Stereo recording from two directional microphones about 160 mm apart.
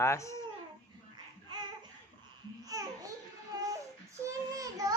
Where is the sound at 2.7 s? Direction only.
20° right (ahead or behind).